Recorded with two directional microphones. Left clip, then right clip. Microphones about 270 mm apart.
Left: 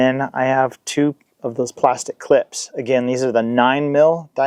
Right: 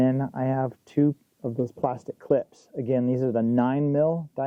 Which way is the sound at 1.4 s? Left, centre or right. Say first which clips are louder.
Left 10 dB; centre.